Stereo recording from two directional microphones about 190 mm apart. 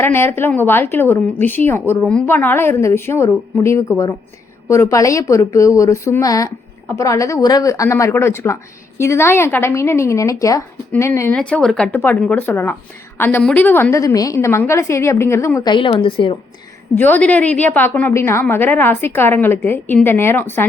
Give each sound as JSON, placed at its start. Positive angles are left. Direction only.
{"t": 0.0, "sound": "speech", "side_deg": 10}
{"t": 16.9, "sound": "speech", "side_deg": 10}